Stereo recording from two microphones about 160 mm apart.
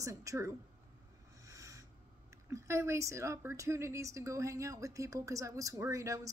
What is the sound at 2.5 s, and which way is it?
A woman's voice, 20° right (ahead or behind).